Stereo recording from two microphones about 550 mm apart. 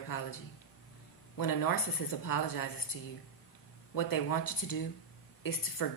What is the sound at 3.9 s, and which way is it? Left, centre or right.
A woman's voice, left.